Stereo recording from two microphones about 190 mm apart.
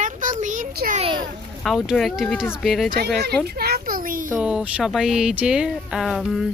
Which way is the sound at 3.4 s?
55° right (ahead or behind).